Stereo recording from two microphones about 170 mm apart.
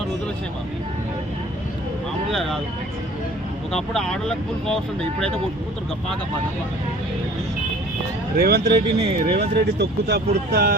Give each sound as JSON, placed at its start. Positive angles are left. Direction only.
{"t": 2.3, "sound": "speech", "side_deg": 0}
{"t": 3.7, "sound": "speech", "side_deg": 5}
{"t": 8.4, "sound": "speech", "side_deg": -65}
{"t": 10.5, "sound": "speech", "side_deg": -65}